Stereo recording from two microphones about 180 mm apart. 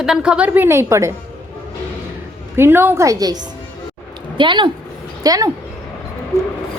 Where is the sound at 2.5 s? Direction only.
15° right (ahead or behind).